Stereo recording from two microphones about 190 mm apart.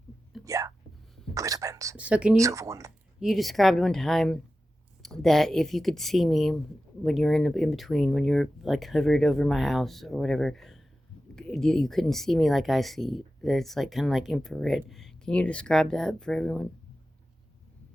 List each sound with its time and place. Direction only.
0.4 s a sound: 15° right (ahead or behind)
1.3 s whispering: 15° right (ahead or behind)
2.0 s speech: 5° right (ahead or behind)
2.3 s speech: 15° right (ahead or behind)
3.2 s speech: centre (ahead or behind)